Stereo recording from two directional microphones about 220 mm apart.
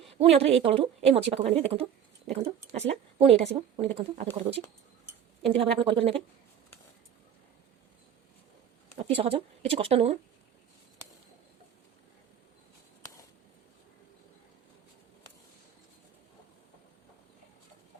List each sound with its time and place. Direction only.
0.2 s speech: 25° right (ahead or behind)
5.8 s speech: 25° right (ahead or behind)
9.0 s speech: 25° right (ahead or behind)